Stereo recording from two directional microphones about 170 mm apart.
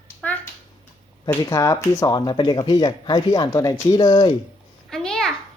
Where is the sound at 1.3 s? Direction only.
15° left (ahead or behind).